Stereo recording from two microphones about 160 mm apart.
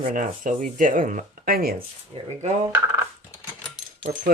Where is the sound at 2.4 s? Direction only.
45° right (ahead or behind).